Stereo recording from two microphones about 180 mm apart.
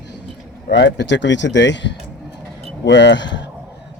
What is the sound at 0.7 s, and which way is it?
Speech, 75° left (ahead or behind).